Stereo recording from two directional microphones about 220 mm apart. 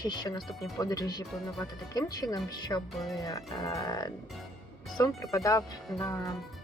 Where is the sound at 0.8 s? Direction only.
15° left (ahead or behind).